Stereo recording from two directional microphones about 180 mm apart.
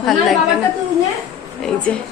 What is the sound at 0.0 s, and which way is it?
Speech, centre (ahead or behind).